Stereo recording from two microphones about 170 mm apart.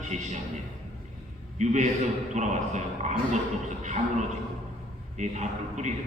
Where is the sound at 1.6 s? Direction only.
45° right (ahead or behind).